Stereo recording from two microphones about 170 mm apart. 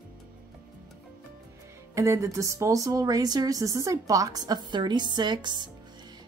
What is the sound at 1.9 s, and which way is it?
Speech, 15° right (ahead or behind).